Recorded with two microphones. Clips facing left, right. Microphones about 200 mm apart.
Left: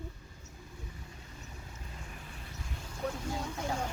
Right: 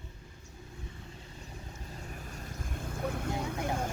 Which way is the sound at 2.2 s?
45° right (ahead or behind).